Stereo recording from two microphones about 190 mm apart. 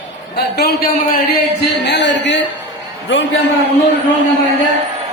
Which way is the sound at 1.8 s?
65° left (ahead or behind).